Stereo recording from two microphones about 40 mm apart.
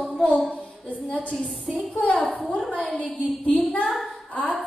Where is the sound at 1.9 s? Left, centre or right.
Left.